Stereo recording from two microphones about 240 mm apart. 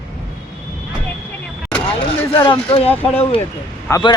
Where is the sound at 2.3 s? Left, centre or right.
Centre.